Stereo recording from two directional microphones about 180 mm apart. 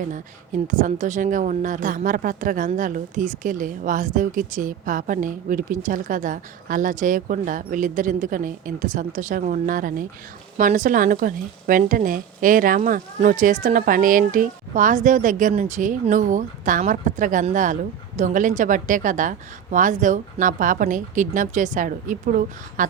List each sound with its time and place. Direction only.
0.7 s speech: 45° right (ahead or behind)